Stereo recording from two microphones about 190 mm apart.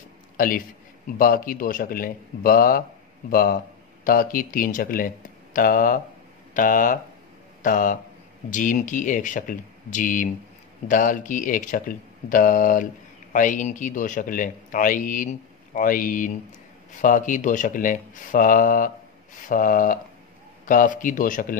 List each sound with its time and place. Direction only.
0.4 s a man's voice: 45° left (ahead or behind)